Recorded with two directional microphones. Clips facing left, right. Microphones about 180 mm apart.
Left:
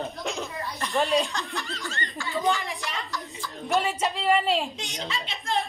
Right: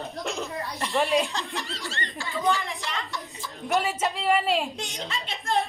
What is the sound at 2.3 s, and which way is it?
Speech, 20° left (ahead or behind).